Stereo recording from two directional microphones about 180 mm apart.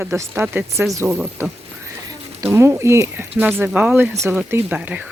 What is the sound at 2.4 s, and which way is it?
Speech, 15° right (ahead or behind).